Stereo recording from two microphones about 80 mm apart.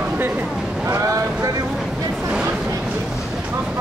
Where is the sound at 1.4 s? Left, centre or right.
Right.